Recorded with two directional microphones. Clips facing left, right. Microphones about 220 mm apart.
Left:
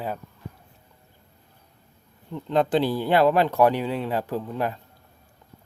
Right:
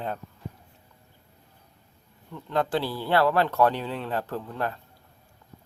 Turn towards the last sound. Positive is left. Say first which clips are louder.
# left 4 dB
turn(degrees=15)  # may be behind; listen again after turning